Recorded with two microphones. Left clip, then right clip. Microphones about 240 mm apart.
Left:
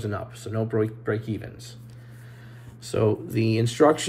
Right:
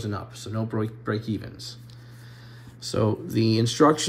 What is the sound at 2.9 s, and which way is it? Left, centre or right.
Speech, centre.